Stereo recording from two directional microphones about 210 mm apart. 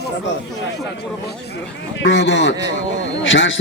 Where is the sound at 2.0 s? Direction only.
55° left (ahead or behind).